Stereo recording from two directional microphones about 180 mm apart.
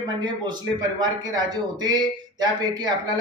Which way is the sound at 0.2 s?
25° right (ahead or behind).